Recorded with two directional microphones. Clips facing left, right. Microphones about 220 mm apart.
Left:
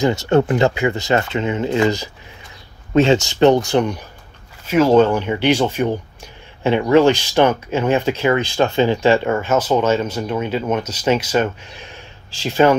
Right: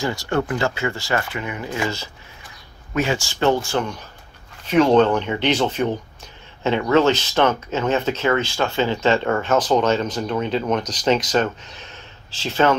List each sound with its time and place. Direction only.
0.0 s speech: 25° left (ahead or behind)
4.6 s speech: 5° left (ahead or behind)